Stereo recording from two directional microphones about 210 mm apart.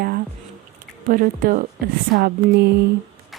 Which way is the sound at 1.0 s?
40° right (ahead or behind).